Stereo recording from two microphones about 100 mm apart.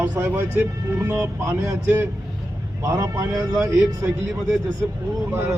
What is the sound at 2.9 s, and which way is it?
Speech, 35° right (ahead or behind).